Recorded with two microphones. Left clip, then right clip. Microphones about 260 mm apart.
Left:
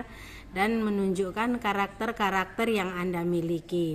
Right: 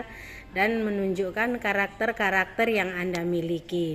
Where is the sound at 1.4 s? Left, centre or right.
Left.